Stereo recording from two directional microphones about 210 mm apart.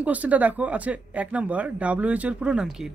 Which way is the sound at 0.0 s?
5° right (ahead or behind).